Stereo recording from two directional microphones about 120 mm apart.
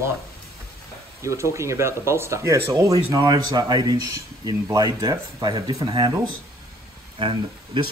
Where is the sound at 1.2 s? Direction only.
25° right (ahead or behind).